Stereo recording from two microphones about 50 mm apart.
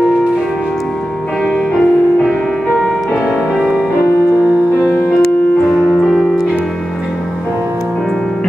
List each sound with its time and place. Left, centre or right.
1.4 s music: centre
3.5 s music: right
5.7 s piano: centre